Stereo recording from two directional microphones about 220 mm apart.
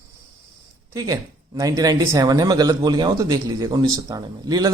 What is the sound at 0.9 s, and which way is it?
Speech, 15° right (ahead or behind).